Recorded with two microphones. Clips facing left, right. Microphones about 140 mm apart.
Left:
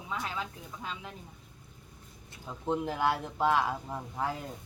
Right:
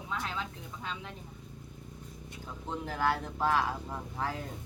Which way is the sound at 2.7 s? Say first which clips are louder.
Left 2 dB; 15° left (ahead or behind).